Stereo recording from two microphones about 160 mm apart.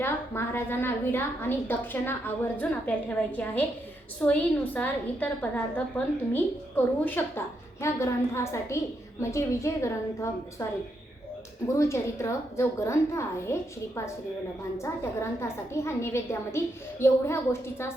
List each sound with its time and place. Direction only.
0.0 s a woman's voice: 15° left (ahead or behind)
11.7 s a woman's voice: 20° left (ahead or behind)